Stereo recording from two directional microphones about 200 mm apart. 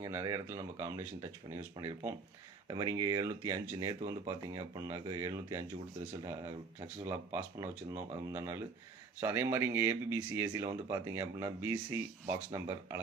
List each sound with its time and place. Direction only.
0.0 s speech: 15° right (ahead or behind)
2.6 s speech: 20° right (ahead or behind)
7.3 s speech: 15° right (ahead or behind)